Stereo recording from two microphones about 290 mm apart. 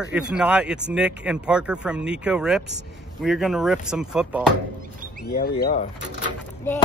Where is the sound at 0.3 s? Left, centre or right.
Centre.